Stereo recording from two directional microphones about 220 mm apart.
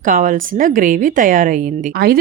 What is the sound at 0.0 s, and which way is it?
Speech, 35° right (ahead or behind).